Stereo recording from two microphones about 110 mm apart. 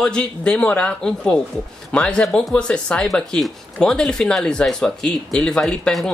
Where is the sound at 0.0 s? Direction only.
10° left (ahead or behind).